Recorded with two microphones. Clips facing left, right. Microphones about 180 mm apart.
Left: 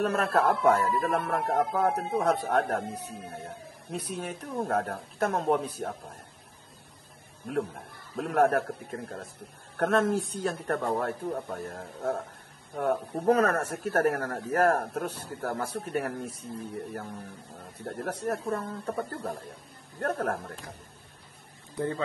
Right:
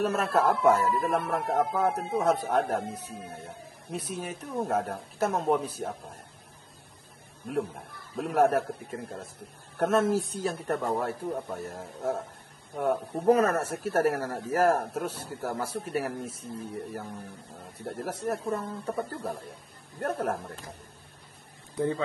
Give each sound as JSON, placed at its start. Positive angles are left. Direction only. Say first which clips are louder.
{"t": 0.0, "sound": "a man's voice", "louder": "even", "side_deg": 0}
{"t": 7.4, "sound": "a man's voice", "louder": "even", "side_deg": 0}
{"t": 21.7, "sound": "speech", "louder": "right 2 dB", "side_deg": -15}